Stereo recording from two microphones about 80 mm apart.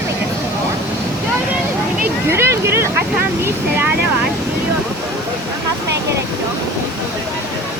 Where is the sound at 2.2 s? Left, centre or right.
Right.